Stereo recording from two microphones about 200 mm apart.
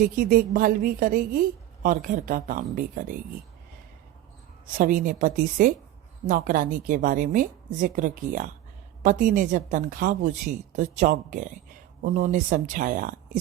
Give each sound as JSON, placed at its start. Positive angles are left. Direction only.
{"t": 0.0, "sound": "a woman's voice", "side_deg": -45}
{"t": 4.8, "sound": "a woman's voice", "side_deg": -40}